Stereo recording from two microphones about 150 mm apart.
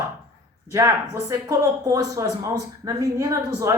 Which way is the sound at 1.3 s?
20° right (ahead or behind).